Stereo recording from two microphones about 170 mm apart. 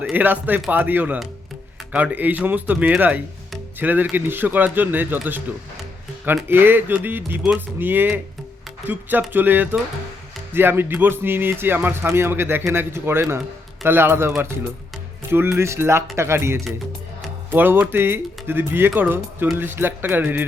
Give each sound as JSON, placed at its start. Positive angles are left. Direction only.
{"t": 0.0, "sound": "speech", "side_deg": -10}
{"t": 15.5, "sound": "speech", "side_deg": -15}